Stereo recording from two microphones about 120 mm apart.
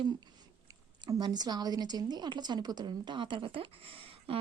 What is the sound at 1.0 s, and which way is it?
A woman's voice, 35° right (ahead or behind).